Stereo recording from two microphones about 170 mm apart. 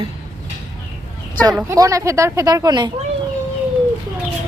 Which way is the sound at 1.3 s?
10° left (ahead or behind).